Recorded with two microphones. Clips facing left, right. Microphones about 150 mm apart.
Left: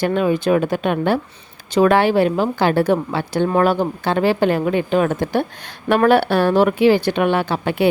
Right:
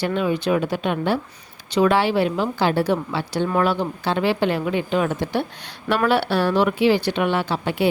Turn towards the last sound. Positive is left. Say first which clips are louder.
# left 3 dB
turn(degrees=55)  # may be behind; listen again after turning